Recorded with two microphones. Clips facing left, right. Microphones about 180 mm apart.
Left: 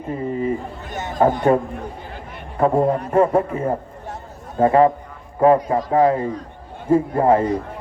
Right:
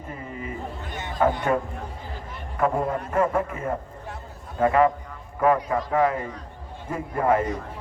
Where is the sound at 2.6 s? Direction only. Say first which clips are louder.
Left 7 dB; 30° left (ahead or behind).